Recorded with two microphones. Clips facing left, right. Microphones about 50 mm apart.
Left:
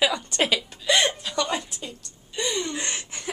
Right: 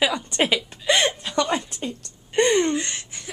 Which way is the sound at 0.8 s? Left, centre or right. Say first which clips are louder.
Right 1 dB; right.